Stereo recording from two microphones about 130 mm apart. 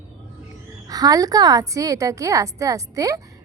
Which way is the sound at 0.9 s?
30° right (ahead or behind).